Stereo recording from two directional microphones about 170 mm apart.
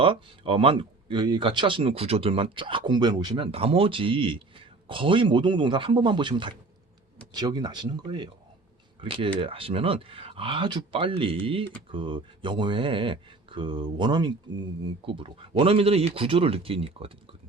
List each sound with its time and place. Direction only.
0.0 s speech: 30° right (ahead or behind)